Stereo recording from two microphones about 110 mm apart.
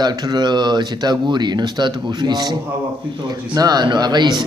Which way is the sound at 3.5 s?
40° right (ahead or behind).